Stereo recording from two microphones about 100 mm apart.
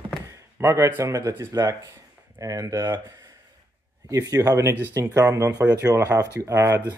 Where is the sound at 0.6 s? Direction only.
25° right (ahead or behind).